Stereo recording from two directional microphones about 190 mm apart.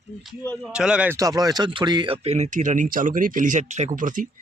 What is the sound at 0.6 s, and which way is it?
Speech, 5° right (ahead or behind).